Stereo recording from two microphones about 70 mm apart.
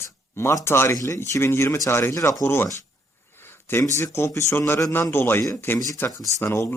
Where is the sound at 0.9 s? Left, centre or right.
Left.